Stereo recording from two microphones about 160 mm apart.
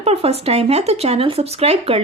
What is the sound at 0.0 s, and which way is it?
A woman's voice, 40° right (ahead or behind).